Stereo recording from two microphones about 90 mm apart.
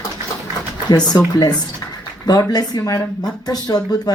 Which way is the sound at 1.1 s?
45° left (ahead or behind).